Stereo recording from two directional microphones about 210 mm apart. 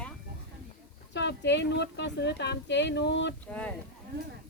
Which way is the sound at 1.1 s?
55° left (ahead or behind).